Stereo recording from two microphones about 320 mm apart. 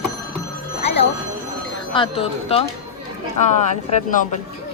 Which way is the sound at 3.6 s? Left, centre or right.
Left.